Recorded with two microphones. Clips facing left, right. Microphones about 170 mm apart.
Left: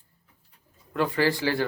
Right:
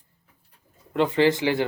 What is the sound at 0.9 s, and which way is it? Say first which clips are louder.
Speech: right 4 dB; 20° right (ahead or behind).